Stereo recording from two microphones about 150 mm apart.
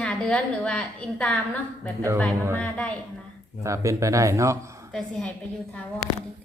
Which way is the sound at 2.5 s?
10° left (ahead or behind).